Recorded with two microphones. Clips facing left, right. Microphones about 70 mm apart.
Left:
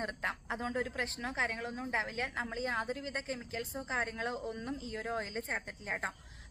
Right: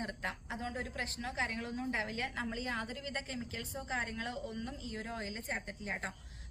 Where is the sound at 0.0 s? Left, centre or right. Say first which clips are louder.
Left 3 dB; left.